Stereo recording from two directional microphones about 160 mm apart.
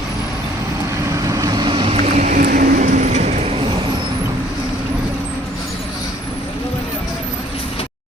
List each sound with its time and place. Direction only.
1.1 s vehicle: 20° right (ahead or behind); by 2.4 s 45° right (ahead or behind)
2.4 s vehicle: 65° right (ahead or behind); by 3.8 s 40° right (ahead or behind)